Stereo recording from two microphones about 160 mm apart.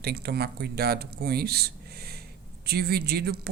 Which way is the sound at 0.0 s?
80° right.